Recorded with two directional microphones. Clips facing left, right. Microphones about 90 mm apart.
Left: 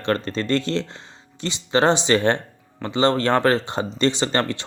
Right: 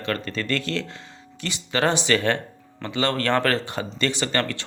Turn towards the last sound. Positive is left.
turn(degrees=25)  # may be behind; listen again after turning